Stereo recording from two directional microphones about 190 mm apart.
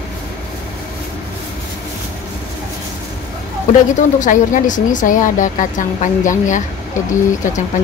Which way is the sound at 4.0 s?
40° left (ahead or behind).